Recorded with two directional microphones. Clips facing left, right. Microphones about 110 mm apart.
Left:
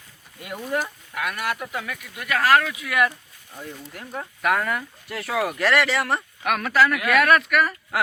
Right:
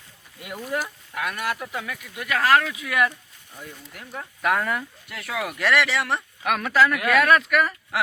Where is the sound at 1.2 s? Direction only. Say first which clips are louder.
Left 1 dB; 20° right (ahead or behind).